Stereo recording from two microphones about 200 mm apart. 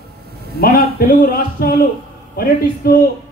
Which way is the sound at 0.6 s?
50° left (ahead or behind).